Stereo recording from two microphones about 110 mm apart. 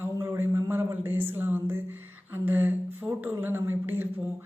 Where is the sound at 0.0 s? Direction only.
20° right (ahead or behind).